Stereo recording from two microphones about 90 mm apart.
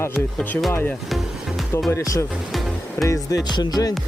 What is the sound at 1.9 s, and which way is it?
Speech, 35° left (ahead or behind).